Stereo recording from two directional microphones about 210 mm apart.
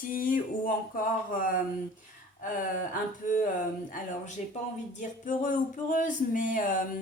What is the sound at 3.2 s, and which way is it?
A woman's voice, 35° left (ahead or behind).